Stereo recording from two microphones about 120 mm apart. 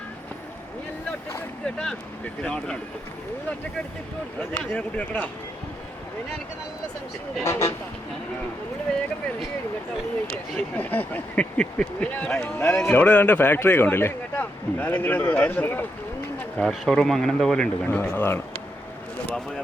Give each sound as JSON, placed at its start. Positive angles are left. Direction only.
{"t": 1.6, "sound": "speech", "side_deg": 5}
{"t": 4.4, "sound": "speech", "side_deg": 15}
{"t": 7.4, "sound": "speech", "side_deg": 20}
{"t": 10.5, "sound": "a man's voice", "side_deg": 10}
{"t": 18.1, "sound": "speech", "side_deg": 20}